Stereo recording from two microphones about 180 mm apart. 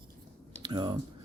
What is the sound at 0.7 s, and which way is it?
Speech, 25° right (ahead or behind).